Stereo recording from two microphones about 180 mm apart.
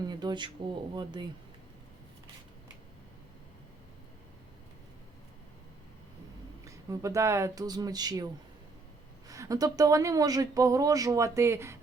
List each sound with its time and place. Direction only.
0.0 s a sound: 25° right (ahead or behind)
6.7 s speech: 15° right (ahead or behind)
9.3 s speech: 20° right (ahead or behind)